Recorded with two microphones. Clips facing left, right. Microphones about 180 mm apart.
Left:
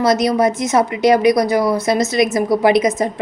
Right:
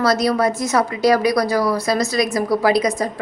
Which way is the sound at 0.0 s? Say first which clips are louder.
Left 3 dB; 20° left (ahead or behind).